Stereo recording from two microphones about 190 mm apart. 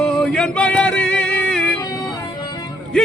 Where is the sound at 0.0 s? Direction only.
5° left (ahead or behind).